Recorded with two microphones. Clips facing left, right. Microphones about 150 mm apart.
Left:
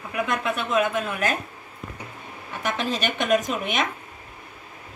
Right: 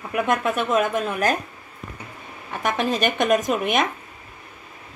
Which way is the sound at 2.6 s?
50° right (ahead or behind).